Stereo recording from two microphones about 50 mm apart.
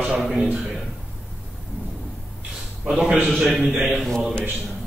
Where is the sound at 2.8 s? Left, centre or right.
Centre.